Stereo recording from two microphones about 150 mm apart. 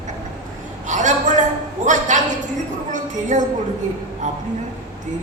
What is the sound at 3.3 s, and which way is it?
A woman's voice, 55° right (ahead or behind).